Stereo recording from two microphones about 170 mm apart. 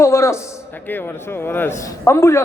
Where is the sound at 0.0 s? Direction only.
15° left (ahead or behind).